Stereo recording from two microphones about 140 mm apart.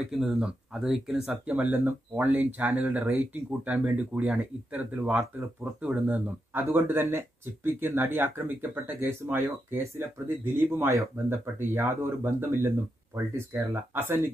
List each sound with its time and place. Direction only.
0.1 s speech: 5° right (ahead or behind)